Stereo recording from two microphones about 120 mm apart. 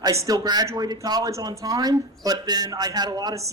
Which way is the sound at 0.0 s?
25° right (ahead or behind).